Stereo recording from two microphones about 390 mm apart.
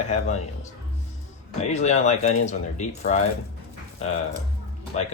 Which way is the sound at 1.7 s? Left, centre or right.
Centre.